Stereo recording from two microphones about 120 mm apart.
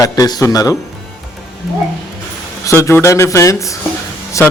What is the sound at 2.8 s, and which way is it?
A man's voice, 25° left (ahead or behind).